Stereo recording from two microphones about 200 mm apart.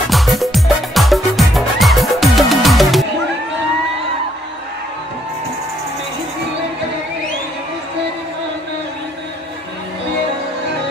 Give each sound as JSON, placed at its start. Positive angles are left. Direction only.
{"t": 0.1, "sound": "music", "side_deg": 0}